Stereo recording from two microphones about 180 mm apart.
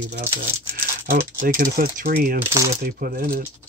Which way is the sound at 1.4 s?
50° right (ahead or behind).